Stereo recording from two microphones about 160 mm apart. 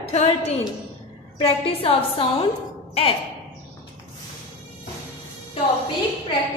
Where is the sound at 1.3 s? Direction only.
35° left (ahead or behind).